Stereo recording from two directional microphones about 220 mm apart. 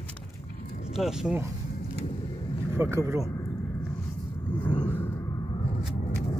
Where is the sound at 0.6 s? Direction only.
35° left (ahead or behind).